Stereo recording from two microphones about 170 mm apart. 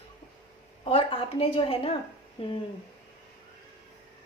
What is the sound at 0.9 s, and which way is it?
A woman's voice, 30° left (ahead or behind).